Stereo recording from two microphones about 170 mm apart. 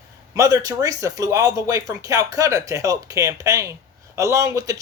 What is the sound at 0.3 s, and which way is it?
Speech, 20° right (ahead or behind).